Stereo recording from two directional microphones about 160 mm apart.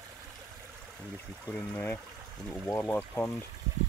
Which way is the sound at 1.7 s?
10° left (ahead or behind).